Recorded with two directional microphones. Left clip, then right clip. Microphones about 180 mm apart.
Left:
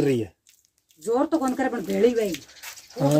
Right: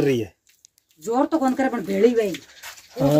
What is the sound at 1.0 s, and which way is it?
Speech, 55° right (ahead or behind).